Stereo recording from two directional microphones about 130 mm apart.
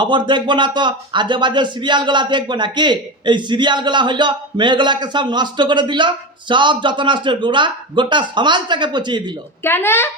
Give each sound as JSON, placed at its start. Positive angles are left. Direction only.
{"t": 0.0, "sound": "speech", "side_deg": -35}
{"t": 9.6, "sound": "speech", "side_deg": 20}